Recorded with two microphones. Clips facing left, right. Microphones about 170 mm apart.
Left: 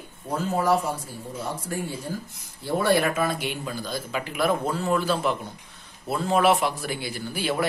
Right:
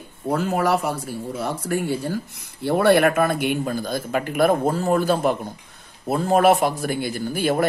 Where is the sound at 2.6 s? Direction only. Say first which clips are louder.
Right 6 dB; 65° right (ahead or behind).